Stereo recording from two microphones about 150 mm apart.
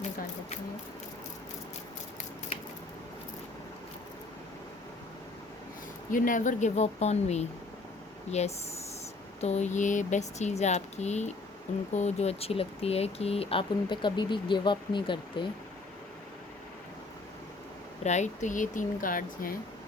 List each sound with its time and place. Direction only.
6.1 s speech: 60° left (ahead or behind); by 15.4 s 30° left (ahead or behind)
18.0 s speech: 50° left (ahead or behind); by 19.5 s 70° left (ahead or behind)